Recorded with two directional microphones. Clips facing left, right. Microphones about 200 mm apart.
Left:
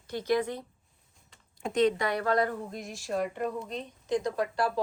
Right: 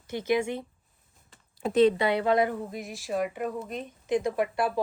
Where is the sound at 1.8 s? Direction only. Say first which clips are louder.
Right 4 dB; 30° right (ahead or behind).